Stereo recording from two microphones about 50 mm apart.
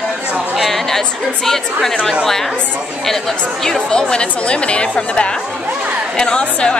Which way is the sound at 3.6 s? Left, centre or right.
Centre.